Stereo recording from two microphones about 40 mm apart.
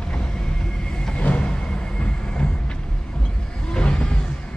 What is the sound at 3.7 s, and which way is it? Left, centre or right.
Vehicle, left.